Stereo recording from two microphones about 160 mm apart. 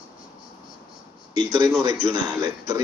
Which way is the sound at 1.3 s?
25° right (ahead or behind).